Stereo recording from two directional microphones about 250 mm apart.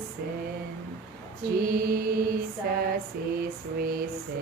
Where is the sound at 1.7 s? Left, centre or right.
Right.